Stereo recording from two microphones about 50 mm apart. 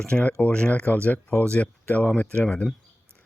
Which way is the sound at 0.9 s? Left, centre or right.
Left.